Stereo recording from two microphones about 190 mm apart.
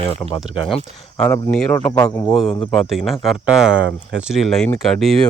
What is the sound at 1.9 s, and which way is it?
Speech, 20° left (ahead or behind).